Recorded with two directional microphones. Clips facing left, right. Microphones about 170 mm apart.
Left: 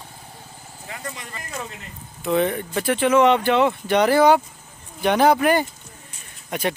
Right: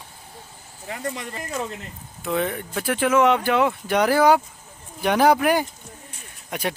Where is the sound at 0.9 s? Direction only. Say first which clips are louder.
Right 5 dB; 40° right (ahead or behind).